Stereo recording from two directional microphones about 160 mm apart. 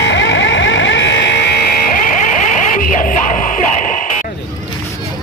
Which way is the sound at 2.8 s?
55° left (ahead or behind).